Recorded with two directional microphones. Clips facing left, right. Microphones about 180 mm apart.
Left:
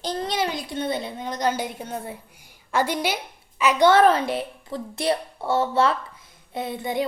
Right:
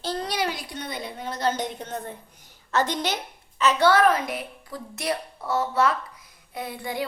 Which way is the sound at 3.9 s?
30° left (ahead or behind).